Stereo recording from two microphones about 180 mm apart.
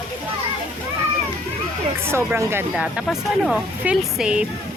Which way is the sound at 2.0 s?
15° right (ahead or behind).